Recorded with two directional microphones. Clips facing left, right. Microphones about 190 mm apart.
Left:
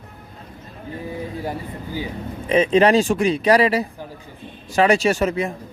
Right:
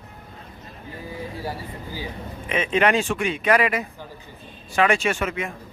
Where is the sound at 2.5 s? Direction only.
35° left (ahead or behind).